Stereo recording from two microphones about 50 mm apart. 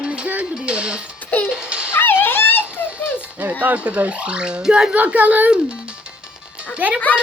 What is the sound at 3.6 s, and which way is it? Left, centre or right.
Speech, right.